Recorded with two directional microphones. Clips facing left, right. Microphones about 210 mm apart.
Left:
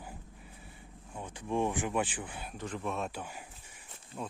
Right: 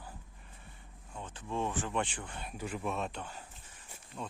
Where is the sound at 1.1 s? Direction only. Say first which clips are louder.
Left 4 dB; 10° left (ahead or behind).